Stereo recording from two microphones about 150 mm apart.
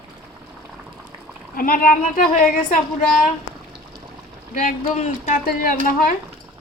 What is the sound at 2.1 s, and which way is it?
Speech, 65° left (ahead or behind).